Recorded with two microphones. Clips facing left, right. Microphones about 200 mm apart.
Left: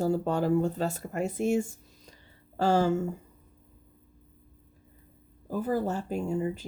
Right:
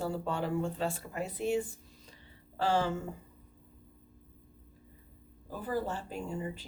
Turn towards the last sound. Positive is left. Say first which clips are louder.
# left 8 dB
turn(degrees=45)  # may be behind; listen again after turning